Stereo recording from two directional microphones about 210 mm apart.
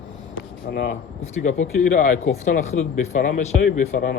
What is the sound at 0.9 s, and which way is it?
Speech, 35° left (ahead or behind).